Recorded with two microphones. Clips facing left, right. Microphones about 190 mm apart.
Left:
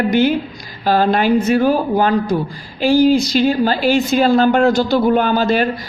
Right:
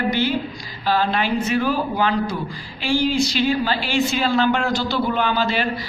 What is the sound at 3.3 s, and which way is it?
Speech, 45° left (ahead or behind).